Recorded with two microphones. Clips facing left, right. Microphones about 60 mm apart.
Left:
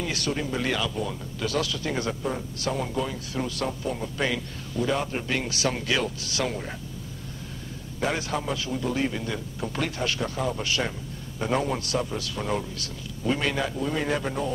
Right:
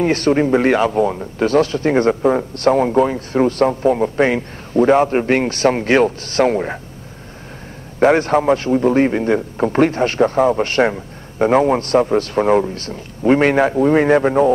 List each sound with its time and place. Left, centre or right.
0.0 s speech: right
8.0 s speech: right